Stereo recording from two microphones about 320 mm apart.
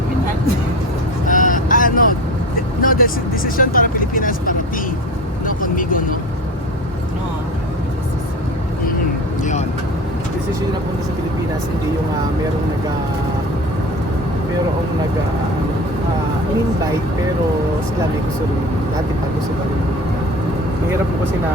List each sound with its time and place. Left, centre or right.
1.3 s vehicle: left
2.8 s speech: left
5.5 s vehicle: left
9.4 s vehicle: left